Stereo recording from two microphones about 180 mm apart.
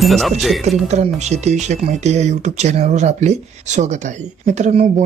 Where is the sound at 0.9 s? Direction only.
40° right (ahead or behind).